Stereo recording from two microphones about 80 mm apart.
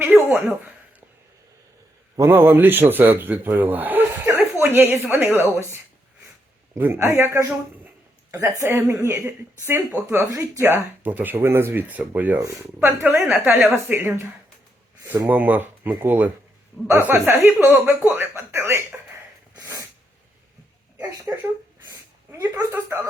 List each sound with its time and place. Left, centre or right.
0.1 s a sound: centre
2.1 s speech: right
4.4 s a sound: right
5.0 s speech: right
12.4 s speech: right
13.0 s speech: right
15.3 s speech: right
21.3 s speech: right
22.7 s speech: right